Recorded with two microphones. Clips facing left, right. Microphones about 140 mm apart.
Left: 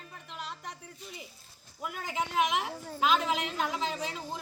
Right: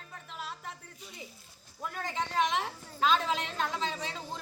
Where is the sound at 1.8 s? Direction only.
5° left (ahead or behind).